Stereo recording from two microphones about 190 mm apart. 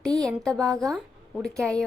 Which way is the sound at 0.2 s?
5° left (ahead or behind).